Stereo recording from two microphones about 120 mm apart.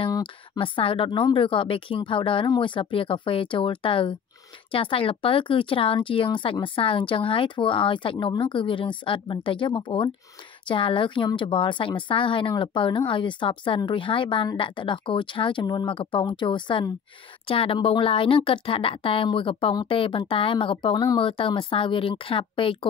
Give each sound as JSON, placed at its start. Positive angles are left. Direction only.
{"t": 0.2, "sound": "speech", "side_deg": 45}
{"t": 21.3, "sound": "speech", "side_deg": 45}